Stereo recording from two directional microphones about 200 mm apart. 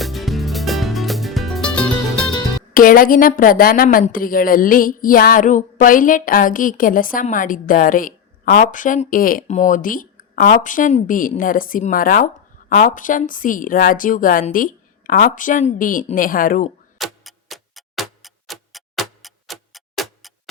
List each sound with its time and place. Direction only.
0.0 s music: centre (ahead or behind)
2.7 s a woman's voice: 45° left (ahead or behind)
17.0 s tick-tock: centre (ahead or behind)